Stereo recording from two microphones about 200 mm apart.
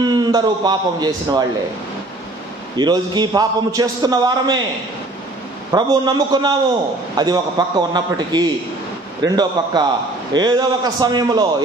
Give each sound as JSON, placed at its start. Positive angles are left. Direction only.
{"t": 0.0, "sound": "a man's voice", "side_deg": -20}
{"t": 2.8, "sound": "a man's voice", "side_deg": -20}
{"t": 5.7, "sound": "a man's voice", "side_deg": -20}